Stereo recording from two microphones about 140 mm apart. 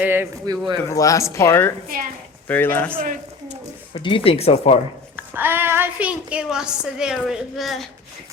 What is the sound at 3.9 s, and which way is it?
Speech, 35° left (ahead or behind).